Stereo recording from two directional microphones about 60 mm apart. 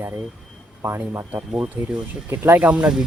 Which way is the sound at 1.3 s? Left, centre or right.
Right.